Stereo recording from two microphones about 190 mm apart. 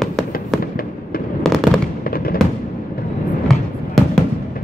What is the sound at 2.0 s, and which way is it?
Fireworks, 50° left (ahead or behind).